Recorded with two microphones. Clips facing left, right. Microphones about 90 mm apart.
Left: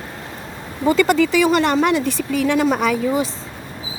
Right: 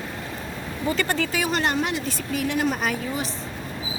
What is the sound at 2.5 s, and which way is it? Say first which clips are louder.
Speech: left 7 dB; 90° left.